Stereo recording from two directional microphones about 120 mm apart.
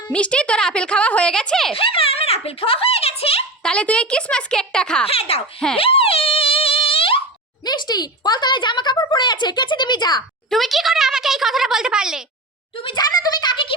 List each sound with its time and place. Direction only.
0.1 s a woman's voice: 10° left (ahead or behind)
1.7 s a child's voice: 50° left (ahead or behind)
3.6 s a woman's voice: 10° left (ahead or behind)
5.0 s a child's voice: 55° left (ahead or behind)
5.7 s a sound: 50° left (ahead or behind)
7.6 s speech: 35° left (ahead or behind)
10.5 s speech: centre (ahead or behind)
12.8 s speech: 40° left (ahead or behind)